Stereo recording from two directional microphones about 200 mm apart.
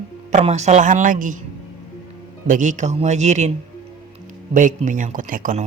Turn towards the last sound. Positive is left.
turn(degrees=-40)  # may be behind; listen again after turning